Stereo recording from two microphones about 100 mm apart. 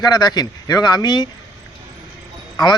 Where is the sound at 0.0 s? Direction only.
40° left (ahead or behind).